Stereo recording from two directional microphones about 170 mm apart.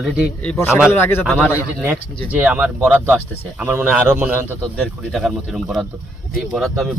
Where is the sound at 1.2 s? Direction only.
5° right (ahead or behind).